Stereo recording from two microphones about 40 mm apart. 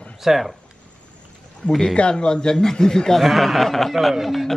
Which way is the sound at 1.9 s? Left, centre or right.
Left.